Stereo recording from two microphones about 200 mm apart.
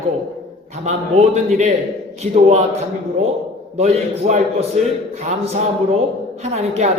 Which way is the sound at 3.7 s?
30° right (ahead or behind).